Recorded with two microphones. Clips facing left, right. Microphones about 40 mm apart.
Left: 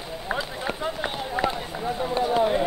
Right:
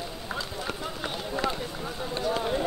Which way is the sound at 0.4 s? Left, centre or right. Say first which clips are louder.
Left 4 dB; left.